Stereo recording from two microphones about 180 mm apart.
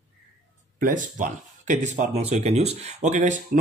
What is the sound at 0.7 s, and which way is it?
Speech, 50° right (ahead or behind).